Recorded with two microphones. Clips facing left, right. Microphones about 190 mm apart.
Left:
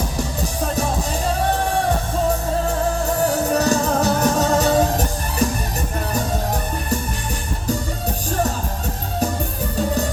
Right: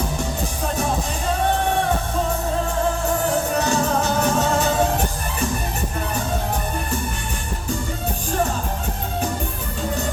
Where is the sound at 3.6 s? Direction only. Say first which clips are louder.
Left 2 dB; 35° left (ahead or behind).